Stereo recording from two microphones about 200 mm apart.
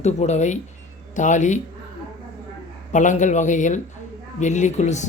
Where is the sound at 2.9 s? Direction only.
40° left (ahead or behind).